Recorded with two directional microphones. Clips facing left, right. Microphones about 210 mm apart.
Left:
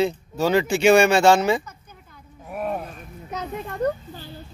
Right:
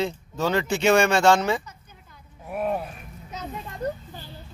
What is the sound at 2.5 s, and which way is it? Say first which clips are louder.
Music: right 1 dB; centre (ahead or behind).